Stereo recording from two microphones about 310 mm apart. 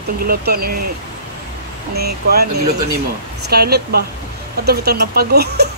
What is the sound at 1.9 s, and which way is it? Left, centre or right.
Speech, right.